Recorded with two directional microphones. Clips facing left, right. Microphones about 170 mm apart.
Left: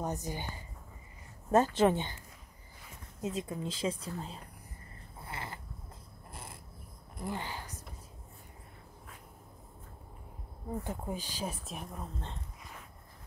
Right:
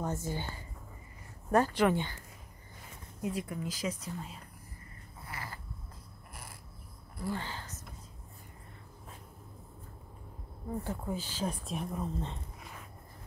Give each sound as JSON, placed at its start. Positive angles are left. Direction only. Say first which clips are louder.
{"t": 0.0, "sound": "speech", "louder": "right 1 dB", "side_deg": 15}
{"t": 3.2, "sound": "speech", "louder": "even", "side_deg": 20}
{"t": 5.2, "sound": "a sound", "louder": "left 2 dB", "side_deg": 25}
{"t": 7.2, "sound": "a woman's voice", "louder": "right 1 dB", "side_deg": 20}
{"t": 10.8, "sound": "speech", "louder": "right 2 dB", "side_deg": 15}
{"t": 11.6, "sound": "speech", "louder": "right 6 dB", "side_deg": 0}